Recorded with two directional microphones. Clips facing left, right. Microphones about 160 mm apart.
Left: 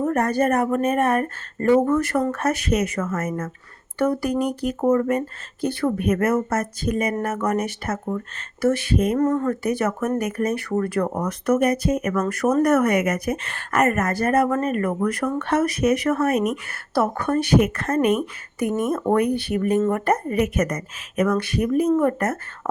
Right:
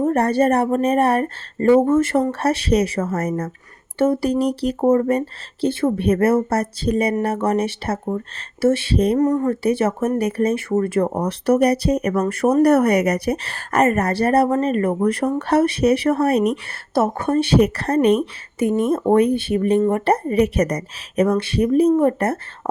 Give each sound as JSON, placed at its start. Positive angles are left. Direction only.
{"t": 0.0, "sound": "speech", "side_deg": -30}
{"t": 9.1, "sound": "speech", "side_deg": -15}
{"t": 9.5, "sound": "speech", "side_deg": -30}